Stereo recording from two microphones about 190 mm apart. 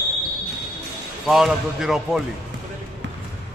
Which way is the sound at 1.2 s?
Centre (ahead or behind).